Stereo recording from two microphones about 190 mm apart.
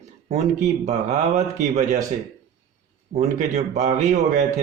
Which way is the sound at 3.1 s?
35° right (ahead or behind).